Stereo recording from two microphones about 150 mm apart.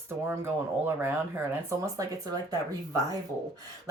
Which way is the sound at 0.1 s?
15° right (ahead or behind).